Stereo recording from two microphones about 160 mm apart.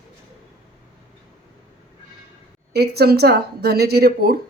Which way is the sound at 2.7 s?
90° right.